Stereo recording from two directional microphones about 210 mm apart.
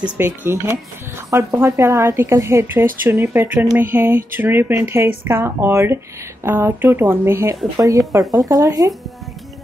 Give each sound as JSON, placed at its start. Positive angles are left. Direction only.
{"t": 0.2, "sound": "a woman's voice", "side_deg": -10}